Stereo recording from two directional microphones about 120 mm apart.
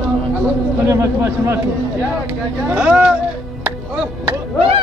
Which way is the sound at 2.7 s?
5° right (ahead or behind).